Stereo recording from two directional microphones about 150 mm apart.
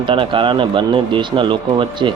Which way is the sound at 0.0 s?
35° right (ahead or behind).